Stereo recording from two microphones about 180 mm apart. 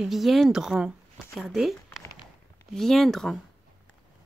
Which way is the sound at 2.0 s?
20° left (ahead or behind).